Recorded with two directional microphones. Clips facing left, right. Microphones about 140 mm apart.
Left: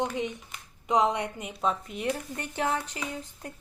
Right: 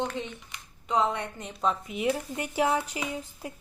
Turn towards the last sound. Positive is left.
turn(degrees=-10)  # may be behind; listen again after turning